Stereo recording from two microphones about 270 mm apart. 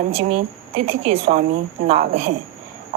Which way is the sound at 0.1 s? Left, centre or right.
Right.